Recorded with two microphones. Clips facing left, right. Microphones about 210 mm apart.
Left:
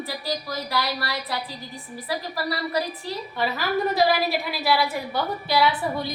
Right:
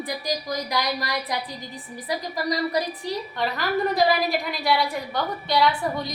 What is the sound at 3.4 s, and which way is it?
A woman's voice, 5° left (ahead or behind).